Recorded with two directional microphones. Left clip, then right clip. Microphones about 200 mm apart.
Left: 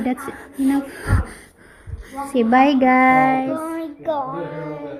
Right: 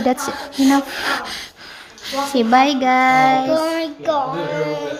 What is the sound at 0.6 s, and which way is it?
Gasp, 15° right (ahead or behind).